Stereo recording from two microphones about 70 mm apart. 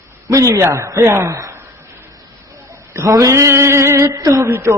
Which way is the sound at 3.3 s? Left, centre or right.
Right.